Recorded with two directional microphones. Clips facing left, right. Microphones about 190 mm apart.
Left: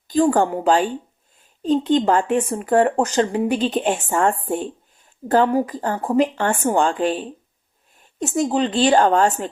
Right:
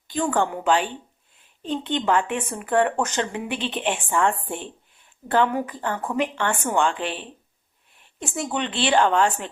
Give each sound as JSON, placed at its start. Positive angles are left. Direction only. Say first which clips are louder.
{"t": 0.1, "sound": "speech", "louder": "left 7 dB", "side_deg": 35}